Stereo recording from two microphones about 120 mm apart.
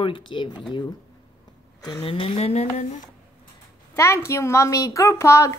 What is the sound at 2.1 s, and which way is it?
Speech, 50° left (ahead or behind).